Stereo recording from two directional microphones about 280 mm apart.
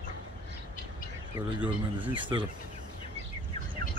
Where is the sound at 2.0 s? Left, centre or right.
Centre.